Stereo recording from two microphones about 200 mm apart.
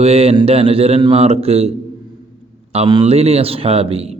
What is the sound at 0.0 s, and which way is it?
Speech, 30° right (ahead or behind).